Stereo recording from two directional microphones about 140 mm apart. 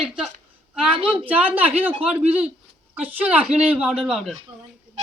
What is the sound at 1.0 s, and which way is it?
Speech, 10° right (ahead or behind).